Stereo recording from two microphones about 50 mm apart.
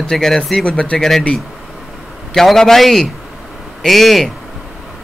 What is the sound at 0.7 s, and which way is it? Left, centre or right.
Speech, left.